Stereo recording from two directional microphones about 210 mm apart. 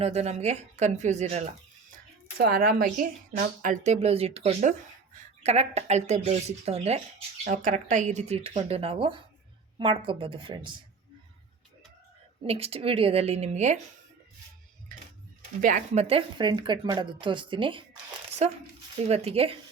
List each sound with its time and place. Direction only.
0.0 s a woman's voice: 30° right (ahead or behind)
12.5 s a woman's voice: 30° right (ahead or behind)
15.6 s a woman's voice: 35° right (ahead or behind)
18.9 s a woman's voice: 30° right (ahead or behind)